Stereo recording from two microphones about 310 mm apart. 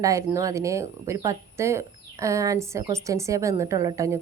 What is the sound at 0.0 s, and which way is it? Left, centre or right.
Speech, centre.